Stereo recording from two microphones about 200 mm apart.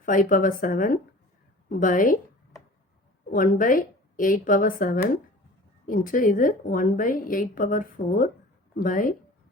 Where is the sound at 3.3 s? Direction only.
45° left (ahead or behind).